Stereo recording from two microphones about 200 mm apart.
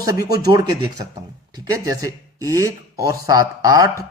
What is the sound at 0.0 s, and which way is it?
Speech, 15° right (ahead or behind).